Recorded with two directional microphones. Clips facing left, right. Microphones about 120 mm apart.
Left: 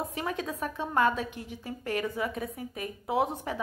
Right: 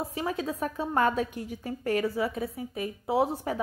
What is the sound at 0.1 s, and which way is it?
A woman's voice, 30° right (ahead or behind).